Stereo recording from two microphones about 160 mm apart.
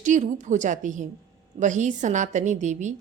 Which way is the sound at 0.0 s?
50° right (ahead or behind).